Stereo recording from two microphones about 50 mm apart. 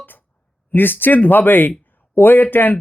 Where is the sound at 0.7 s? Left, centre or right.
Left.